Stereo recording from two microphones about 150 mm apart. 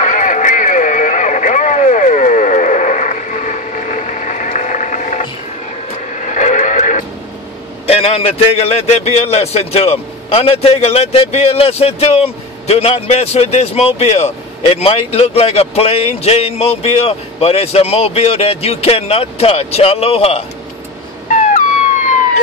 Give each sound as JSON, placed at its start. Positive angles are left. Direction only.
{"t": 0.0, "sound": "radio", "side_deg": 55}
{"t": 7.8, "sound": "a man's voice", "side_deg": 40}
{"t": 21.3, "sound": "police car", "side_deg": 55}